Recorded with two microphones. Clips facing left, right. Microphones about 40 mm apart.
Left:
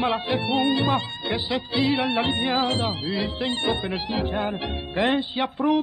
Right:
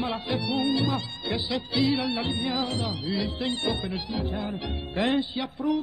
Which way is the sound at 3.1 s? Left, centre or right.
Left.